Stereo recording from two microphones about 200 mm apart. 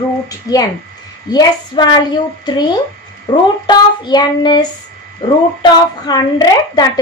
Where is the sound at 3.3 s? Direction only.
20° left (ahead or behind).